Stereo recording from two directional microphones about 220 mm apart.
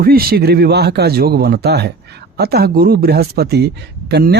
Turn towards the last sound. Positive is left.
turn(degrees=-45)  # may be behind; listen again after turning